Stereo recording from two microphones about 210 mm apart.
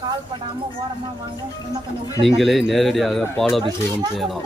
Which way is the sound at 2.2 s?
Centre (ahead or behind).